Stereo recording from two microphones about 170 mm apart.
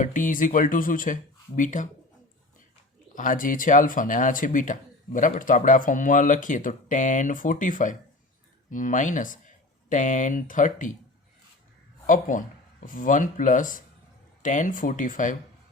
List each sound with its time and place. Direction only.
0.0 s speech: 50° left (ahead or behind)
3.2 s speech: 50° left (ahead or behind)
12.0 s speech: 50° left (ahead or behind)